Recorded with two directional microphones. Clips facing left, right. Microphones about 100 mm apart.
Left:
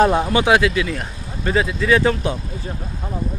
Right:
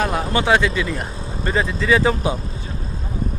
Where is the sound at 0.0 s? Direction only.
30° left (ahead or behind).